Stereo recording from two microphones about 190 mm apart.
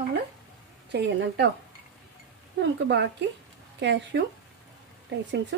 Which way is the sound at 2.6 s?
65° right (ahead or behind).